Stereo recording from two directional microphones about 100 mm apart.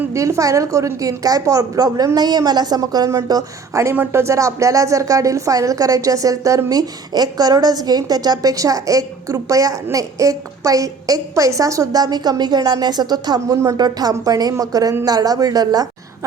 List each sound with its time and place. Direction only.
0.1 s a woman's voice: 30° right (ahead or behind)
3.9 s a woman's voice: 25° right (ahead or behind); by 15.9 s 40° right (ahead or behind)